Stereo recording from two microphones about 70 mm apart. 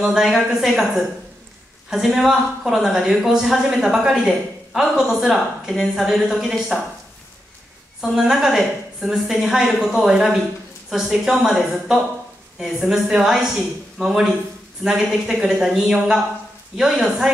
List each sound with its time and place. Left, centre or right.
0.0 s a woman's voice: centre
1.9 s a woman's voice: centre
8.0 s a woman's voice: centre
14.8 s a woman's voice: centre